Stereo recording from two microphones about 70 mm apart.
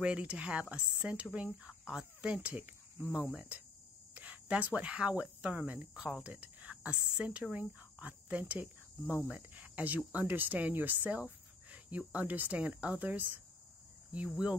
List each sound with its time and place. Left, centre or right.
0.0 s speech: centre
14.1 s cricket: centre